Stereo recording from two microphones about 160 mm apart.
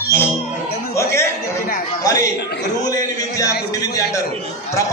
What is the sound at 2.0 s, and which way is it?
Speech, 20° left (ahead or behind).